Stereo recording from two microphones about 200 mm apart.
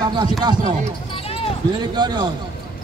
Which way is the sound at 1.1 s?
30° left (ahead or behind).